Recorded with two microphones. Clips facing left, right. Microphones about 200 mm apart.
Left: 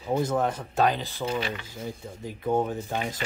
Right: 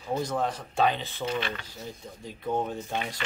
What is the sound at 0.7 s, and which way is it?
Speech, centre (ahead or behind).